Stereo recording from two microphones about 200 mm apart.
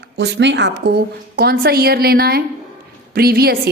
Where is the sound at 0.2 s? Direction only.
60° right (ahead or behind).